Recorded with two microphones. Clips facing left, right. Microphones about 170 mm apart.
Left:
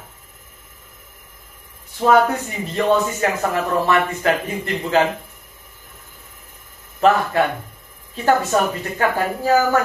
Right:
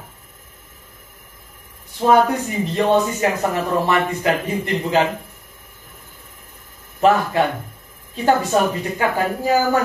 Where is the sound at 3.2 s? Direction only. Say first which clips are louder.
Right 1 dB; 15° right (ahead or behind).